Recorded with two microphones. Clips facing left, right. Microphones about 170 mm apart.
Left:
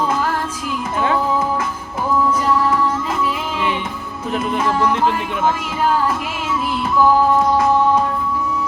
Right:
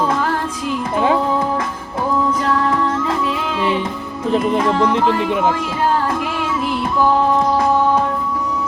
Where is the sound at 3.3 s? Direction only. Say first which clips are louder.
Right 2 dB; 30° right (ahead or behind).